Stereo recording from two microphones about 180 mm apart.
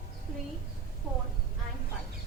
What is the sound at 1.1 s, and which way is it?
Speech, 5° right (ahead or behind).